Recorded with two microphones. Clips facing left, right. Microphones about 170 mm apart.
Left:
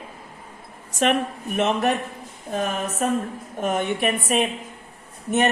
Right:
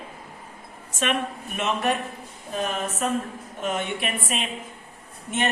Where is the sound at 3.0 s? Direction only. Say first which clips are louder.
Left 4 dB; 45° left (ahead or behind).